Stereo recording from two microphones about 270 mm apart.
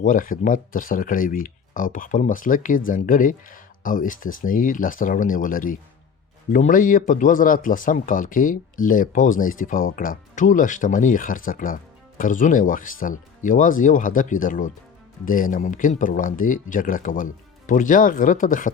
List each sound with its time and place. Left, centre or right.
0.0 s speech: left